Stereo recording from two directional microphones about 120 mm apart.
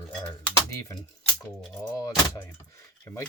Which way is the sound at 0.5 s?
25° left (ahead or behind).